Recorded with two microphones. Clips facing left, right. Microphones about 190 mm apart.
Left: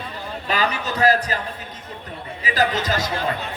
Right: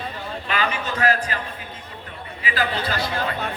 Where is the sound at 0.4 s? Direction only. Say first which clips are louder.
Left 2 dB; 40° left (ahead or behind).